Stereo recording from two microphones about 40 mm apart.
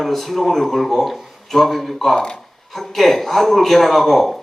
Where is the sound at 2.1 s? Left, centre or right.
Left.